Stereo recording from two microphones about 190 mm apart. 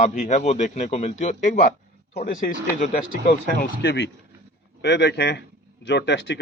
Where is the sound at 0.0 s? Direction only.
40° left (ahead or behind).